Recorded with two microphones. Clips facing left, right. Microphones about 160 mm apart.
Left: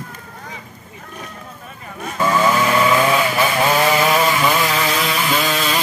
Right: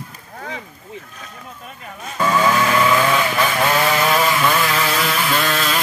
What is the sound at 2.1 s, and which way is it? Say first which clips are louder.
Chainsaw: left 1 dB; 10° left (ahead or behind).